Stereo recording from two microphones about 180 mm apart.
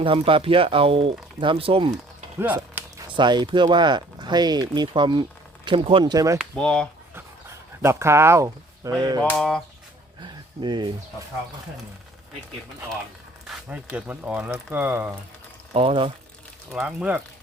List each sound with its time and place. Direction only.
0.0 s speech: 30° right (ahead or behind)
2.4 s a sound: 10° right (ahead or behind)
3.1 s speech: 25° right (ahead or behind)
6.4 s speech: 5° left (ahead or behind)
7.8 s speech: 15° right (ahead or behind)
9.3 s speech: 5° left (ahead or behind)
10.6 s speech: 25° right (ahead or behind)
13.5 s speech: 5° right (ahead or behind)
15.7 s speech: 30° right (ahead or behind)
16.7 s speech: 5° right (ahead or behind)